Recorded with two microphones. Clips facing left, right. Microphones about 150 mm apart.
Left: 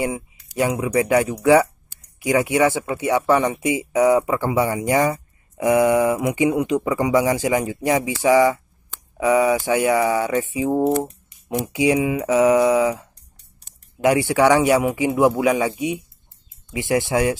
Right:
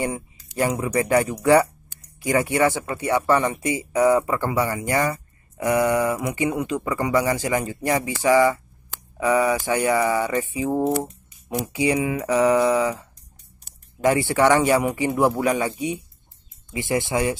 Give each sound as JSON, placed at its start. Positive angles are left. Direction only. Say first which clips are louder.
{"t": 0.6, "sound": "speech", "louder": "left 2 dB", "side_deg": 10}
{"t": 11.0, "sound": "a sound", "louder": "left 3 dB", "side_deg": 10}
{"t": 11.6, "sound": "speech", "louder": "left 3 dB", "side_deg": 15}